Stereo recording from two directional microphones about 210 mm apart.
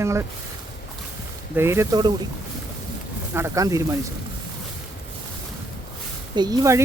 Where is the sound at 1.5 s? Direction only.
10° right (ahead or behind).